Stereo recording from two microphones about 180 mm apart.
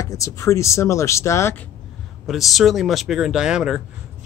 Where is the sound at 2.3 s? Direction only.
Centre (ahead or behind).